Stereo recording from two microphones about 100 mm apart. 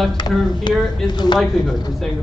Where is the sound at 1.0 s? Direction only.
45° left (ahead or behind).